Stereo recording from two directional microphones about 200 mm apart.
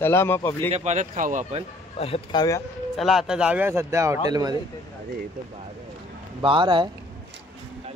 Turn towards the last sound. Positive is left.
turn(degrees=-25)  # may be behind; listen again after turning